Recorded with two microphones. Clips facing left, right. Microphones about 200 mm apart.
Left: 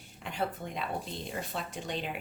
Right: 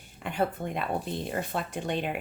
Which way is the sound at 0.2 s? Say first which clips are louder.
Right 6 dB; 55° right (ahead or behind).